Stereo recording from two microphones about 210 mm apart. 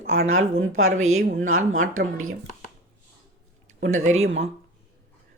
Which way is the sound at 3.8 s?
75° right (ahead or behind).